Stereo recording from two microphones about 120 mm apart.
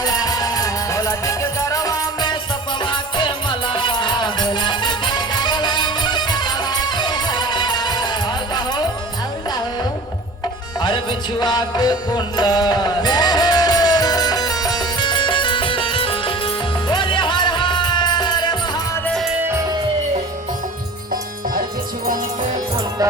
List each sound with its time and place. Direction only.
0.0 s music: 35° left (ahead or behind)
2.8 s music: 40° left (ahead or behind)
10.8 s music: 40° left (ahead or behind)
19.4 s music: 20° right (ahead or behind)